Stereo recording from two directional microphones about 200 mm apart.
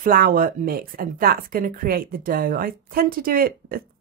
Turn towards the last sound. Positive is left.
turn(degrees=-45)  # may be behind; listen again after turning